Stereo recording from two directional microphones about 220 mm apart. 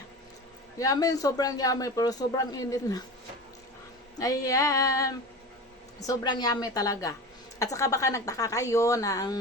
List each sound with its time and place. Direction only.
0.8 s speech: 15° left (ahead or behind)
4.2 s speech: 15° left (ahead or behind)